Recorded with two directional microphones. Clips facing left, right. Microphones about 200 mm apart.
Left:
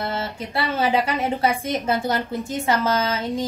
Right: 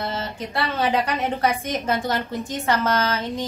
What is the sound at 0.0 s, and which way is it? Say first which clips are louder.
A woman's voice: left 1 dB; centre (ahead or behind).